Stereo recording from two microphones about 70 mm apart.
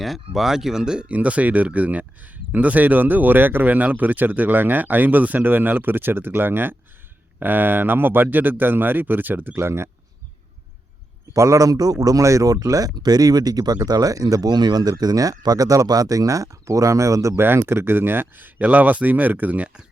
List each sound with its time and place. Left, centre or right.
0.0 s speech: centre; by 9.9 s right
11.3 s speech: right
17.6 s speech: right; by 19.8 s centre